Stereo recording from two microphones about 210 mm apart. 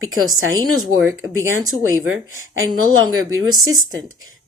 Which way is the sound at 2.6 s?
75° right (ahead or behind).